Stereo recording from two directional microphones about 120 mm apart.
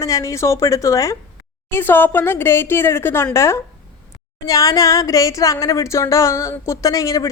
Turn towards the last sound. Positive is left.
turn(degrees=30)  # may be behind; listen again after turning